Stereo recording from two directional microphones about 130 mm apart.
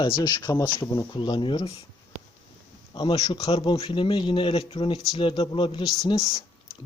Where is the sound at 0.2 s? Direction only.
35° left (ahead or behind).